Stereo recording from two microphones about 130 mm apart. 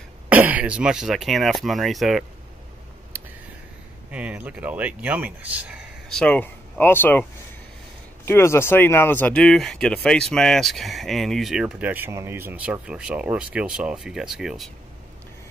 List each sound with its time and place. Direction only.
0.3 s speech: 10° right (ahead or behind)
4.1 s speech: 10° right (ahead or behind)
6.0 s speech: 5° left (ahead or behind)
8.3 s speech: 20° left (ahead or behind)
9.4 s speech: 5° left (ahead or behind)